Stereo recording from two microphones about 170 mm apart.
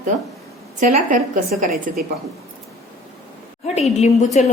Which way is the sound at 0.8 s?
50° right (ahead or behind).